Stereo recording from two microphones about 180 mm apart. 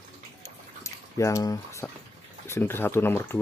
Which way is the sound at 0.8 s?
15° left (ahead or behind).